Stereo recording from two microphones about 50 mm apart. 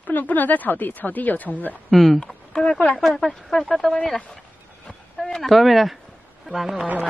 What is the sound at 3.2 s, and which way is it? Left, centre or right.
Speech, centre.